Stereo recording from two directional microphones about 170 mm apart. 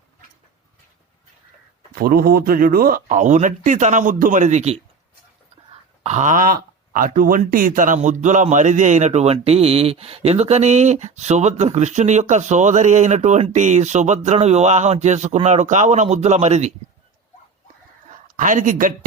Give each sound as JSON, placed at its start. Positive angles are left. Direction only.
{"t": 2.0, "sound": "speech", "side_deg": -60}
{"t": 6.0, "sound": "speech", "side_deg": -40}
{"t": 18.3, "sound": "speech", "side_deg": -50}